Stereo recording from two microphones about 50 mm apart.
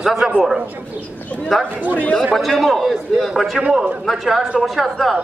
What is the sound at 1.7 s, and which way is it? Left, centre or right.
Speech, right.